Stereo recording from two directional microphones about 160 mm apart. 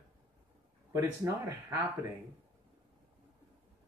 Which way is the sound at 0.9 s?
20° right (ahead or behind).